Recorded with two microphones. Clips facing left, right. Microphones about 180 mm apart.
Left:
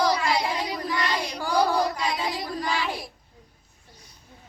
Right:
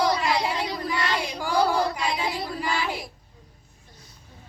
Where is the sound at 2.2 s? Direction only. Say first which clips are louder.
Even; 10° right (ahead or behind).